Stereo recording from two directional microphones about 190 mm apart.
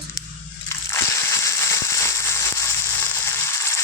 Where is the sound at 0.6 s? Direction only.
15° left (ahead or behind).